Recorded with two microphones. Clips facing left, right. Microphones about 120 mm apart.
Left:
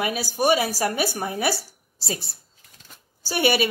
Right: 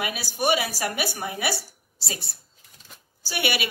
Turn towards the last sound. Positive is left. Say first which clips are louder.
# left 6 dB
turn(degrees=40)  # may be behind; listen again after turning